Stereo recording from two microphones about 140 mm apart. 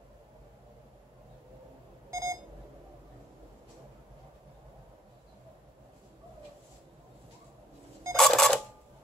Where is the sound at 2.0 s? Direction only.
20° right (ahead or behind).